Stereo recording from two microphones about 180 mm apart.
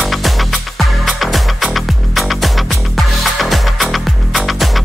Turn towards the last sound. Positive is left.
turn(degrees=0)  # may be behind; listen again after turning